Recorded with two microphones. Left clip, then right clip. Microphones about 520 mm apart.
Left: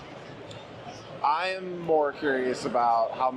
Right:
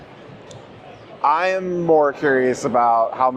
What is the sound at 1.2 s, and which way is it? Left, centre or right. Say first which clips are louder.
Speech: right 9 dB; right.